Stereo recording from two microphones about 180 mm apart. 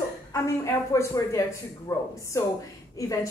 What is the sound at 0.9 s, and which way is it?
A woman's voice, 15° left (ahead or behind).